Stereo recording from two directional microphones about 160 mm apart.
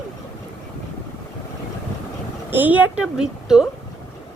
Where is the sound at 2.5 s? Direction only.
10° right (ahead or behind).